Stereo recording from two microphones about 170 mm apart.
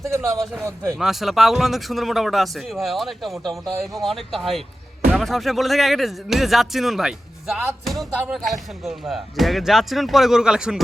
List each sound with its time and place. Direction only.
0.1 s a man's voice: 15° right (ahead or behind)
0.9 s speech: centre (ahead or behind)